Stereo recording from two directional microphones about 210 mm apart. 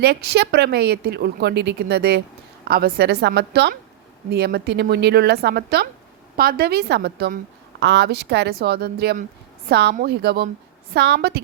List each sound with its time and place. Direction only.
0.0 s speech: 50° right (ahead or behind)